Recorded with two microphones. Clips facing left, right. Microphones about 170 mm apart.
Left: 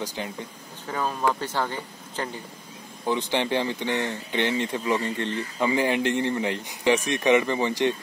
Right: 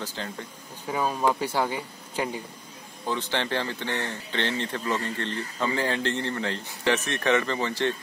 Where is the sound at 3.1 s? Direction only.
15° left (ahead or behind).